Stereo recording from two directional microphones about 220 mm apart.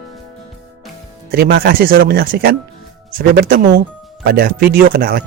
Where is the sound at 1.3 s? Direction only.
45° right (ahead or behind).